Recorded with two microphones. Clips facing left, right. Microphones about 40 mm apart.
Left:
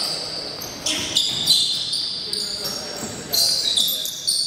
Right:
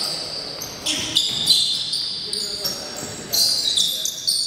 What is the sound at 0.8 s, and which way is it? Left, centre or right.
Speech, centre.